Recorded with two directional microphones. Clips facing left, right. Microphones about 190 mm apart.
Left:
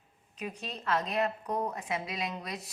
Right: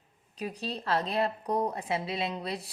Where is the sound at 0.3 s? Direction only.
35° right (ahead or behind).